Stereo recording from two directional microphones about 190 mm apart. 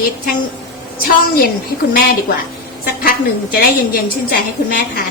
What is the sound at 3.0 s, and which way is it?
A woman's voice, 50° left (ahead or behind).